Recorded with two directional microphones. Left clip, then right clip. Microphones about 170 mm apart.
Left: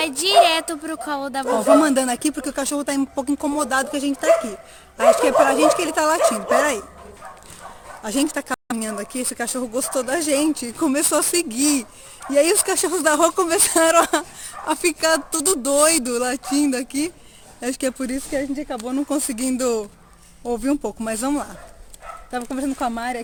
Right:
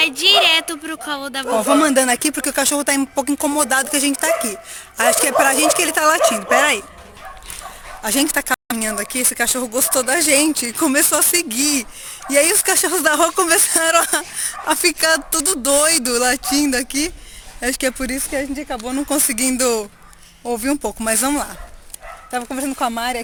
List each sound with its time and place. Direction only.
0.0 s speech: 35° left (ahead or behind)
1.5 s speech: 10° right (ahead or behind)
8.0 s speech: 5° right (ahead or behind)